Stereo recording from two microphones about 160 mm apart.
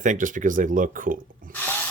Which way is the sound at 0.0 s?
55° right (ahead or behind).